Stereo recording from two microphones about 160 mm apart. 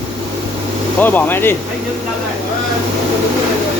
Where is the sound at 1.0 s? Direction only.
10° left (ahead or behind).